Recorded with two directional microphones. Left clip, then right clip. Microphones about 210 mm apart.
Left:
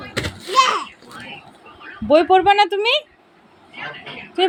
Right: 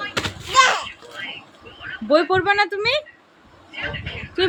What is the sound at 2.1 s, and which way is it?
Speech, 5° left (ahead or behind).